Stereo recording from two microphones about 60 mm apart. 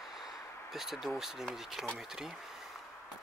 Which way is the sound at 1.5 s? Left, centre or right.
Centre.